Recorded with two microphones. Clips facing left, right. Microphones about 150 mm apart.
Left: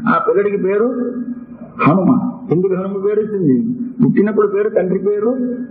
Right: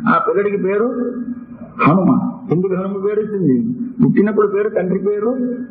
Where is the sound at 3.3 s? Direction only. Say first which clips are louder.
Left 1 dB; centre (ahead or behind).